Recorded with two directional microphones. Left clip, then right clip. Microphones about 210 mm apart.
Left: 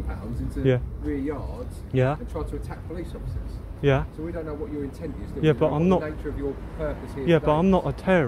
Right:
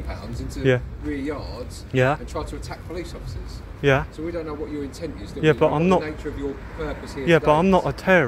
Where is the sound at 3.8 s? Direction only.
Centre (ahead or behind).